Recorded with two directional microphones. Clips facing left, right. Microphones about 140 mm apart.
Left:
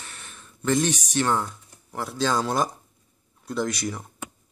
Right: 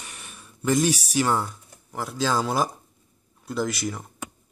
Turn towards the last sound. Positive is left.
turn(degrees=0)  # may be behind; listen again after turning